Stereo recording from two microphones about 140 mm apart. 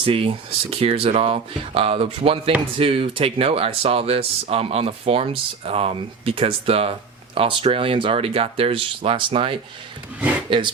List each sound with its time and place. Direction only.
0.0 s speech: 40° right (ahead or behind)